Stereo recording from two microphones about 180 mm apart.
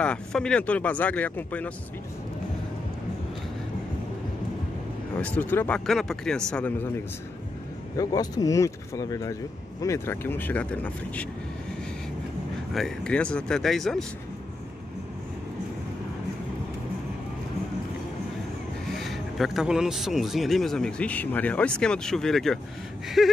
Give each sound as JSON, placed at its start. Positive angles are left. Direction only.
{"t": 0.0, "sound": "speech", "side_deg": 5}
{"t": 5.2, "sound": "speech", "side_deg": 10}
{"t": 8.0, "sound": "speech", "side_deg": 20}
{"t": 12.7, "sound": "a man's voice", "side_deg": 5}
{"t": 19.0, "sound": "a man's voice", "side_deg": 0}